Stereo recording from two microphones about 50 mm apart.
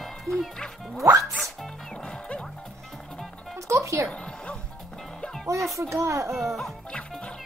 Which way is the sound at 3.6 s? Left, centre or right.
Right.